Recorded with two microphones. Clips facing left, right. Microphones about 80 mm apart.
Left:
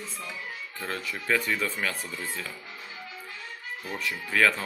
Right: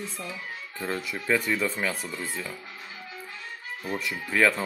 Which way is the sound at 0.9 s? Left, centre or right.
Centre.